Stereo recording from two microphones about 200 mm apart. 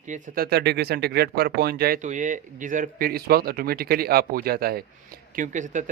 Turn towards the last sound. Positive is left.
turn(degrees=-40)  # may be behind; listen again after turning